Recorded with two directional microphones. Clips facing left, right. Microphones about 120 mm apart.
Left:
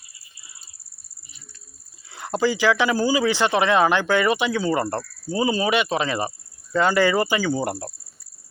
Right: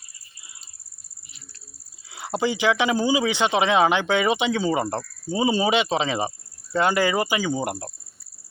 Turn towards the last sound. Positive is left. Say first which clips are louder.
# left 2 dB
turn(degrees=-15)  # may be behind; listen again after turning